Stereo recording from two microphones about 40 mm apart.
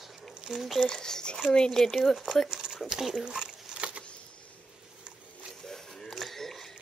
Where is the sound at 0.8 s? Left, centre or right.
Centre.